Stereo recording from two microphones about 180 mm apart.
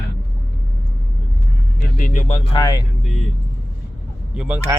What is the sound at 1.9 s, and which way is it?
Speech, 45° left (ahead or behind).